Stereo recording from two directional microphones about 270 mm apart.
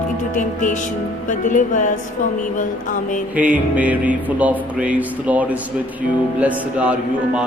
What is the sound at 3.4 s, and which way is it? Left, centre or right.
Speech, centre.